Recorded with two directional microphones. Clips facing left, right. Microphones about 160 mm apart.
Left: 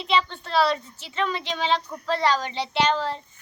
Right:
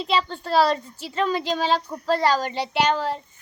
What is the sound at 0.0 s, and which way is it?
Speech, 40° right (ahead or behind).